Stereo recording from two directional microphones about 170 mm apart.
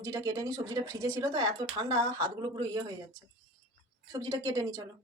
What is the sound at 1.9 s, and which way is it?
Speech, 20° right (ahead or behind).